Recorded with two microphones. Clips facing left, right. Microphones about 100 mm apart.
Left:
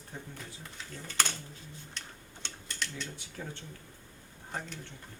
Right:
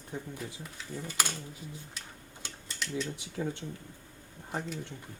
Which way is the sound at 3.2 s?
15° right (ahead or behind).